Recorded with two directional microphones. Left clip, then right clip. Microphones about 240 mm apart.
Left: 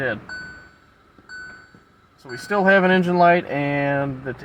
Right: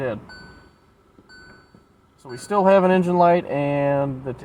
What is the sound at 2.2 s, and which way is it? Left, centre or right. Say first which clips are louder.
Speech: right 1 dB; centre.